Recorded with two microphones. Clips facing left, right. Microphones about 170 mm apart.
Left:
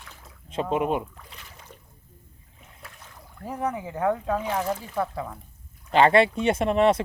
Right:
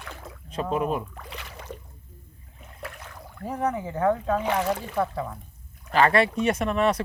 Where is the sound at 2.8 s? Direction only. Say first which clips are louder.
Right 9 dB; 80° right.